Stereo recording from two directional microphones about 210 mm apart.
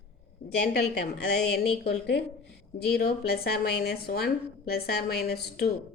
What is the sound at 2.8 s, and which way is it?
A woman's voice, 50° left (ahead or behind).